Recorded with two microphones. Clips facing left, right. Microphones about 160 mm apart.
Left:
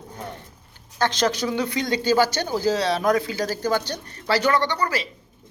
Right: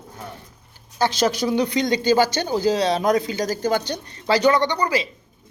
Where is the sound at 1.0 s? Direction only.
10° right (ahead or behind).